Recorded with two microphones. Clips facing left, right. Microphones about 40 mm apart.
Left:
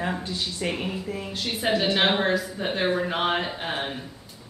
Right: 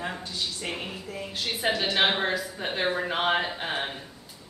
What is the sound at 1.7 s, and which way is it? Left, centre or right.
Speech, centre.